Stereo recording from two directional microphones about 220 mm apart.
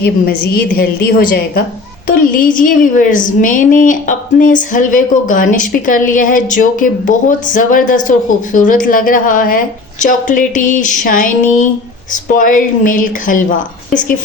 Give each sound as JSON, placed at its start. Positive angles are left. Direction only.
{"t": 0.0, "sound": "a woman's voice", "side_deg": 45}